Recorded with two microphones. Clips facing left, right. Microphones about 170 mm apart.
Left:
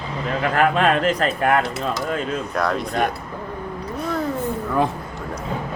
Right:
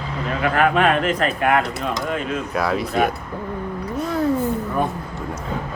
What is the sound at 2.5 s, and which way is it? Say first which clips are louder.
Speech: right 2 dB; 5° right (ahead or behind).